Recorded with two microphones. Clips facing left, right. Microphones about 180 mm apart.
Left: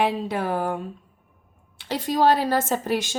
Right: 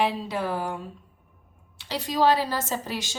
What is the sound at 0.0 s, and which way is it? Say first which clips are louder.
Speech: left 2 dB; 50° left (ahead or behind).